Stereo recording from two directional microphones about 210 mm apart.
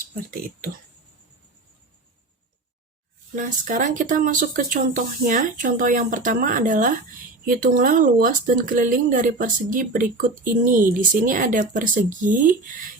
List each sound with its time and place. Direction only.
3.3 s speech: 40° right (ahead or behind)